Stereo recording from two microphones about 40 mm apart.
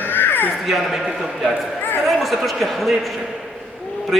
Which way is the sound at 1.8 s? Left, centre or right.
Left.